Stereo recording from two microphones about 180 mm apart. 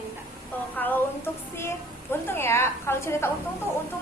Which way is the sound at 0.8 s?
10° left (ahead or behind).